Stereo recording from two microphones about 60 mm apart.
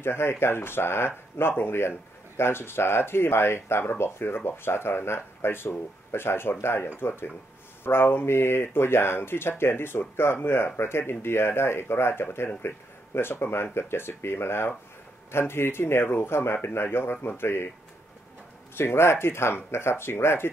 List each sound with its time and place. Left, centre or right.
0.0 s speech: left
18.8 s speech: left